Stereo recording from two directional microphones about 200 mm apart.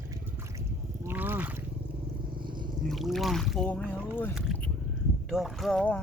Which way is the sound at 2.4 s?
25° right (ahead or behind).